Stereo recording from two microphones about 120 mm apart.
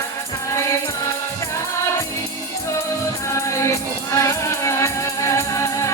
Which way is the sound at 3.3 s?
25° left (ahead or behind).